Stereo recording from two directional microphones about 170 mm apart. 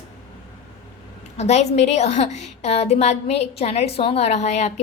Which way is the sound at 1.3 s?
40° left (ahead or behind).